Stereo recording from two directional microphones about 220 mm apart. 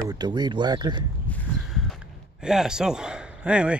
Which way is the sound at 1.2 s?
5° left (ahead or behind).